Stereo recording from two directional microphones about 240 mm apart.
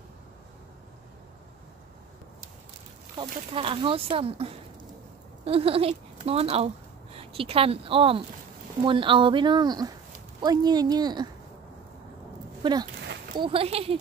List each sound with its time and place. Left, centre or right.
3.2 s speech: right
12.6 s speech: centre